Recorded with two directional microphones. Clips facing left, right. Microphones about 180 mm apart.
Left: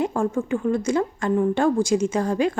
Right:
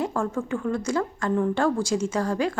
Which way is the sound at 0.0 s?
20° left (ahead or behind).